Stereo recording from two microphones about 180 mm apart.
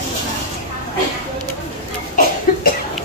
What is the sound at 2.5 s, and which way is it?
Cough, 50° left (ahead or behind).